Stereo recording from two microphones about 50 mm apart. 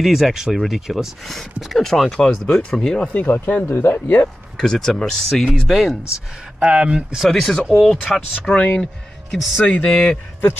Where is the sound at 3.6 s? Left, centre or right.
Left.